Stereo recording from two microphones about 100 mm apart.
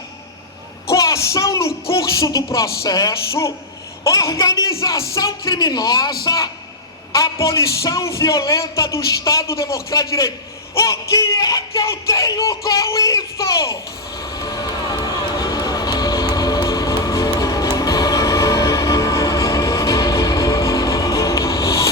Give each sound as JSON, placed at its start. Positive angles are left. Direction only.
{"t": 0.9, "sound": "music", "side_deg": 30}
{"t": 4.0, "sound": "a man's voice", "side_deg": 35}
{"t": 14.2, "sound": "run", "side_deg": 40}